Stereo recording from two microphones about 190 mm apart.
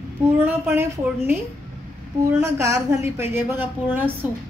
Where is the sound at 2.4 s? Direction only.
15° right (ahead or behind).